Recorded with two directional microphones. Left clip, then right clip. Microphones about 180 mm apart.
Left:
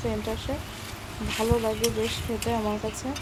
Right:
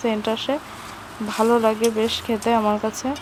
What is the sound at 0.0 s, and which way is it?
Speech, 20° right (ahead or behind).